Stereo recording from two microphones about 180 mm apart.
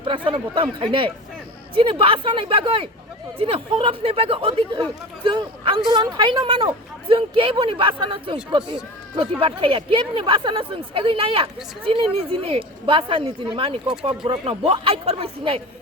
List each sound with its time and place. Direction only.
0.0 s speech: 30° right (ahead or behind)